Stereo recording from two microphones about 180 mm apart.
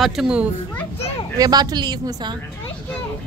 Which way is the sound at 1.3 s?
20° right (ahead or behind).